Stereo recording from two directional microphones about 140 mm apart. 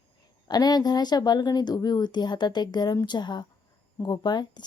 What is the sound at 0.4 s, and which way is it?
A woman's voice, 30° left (ahead or behind).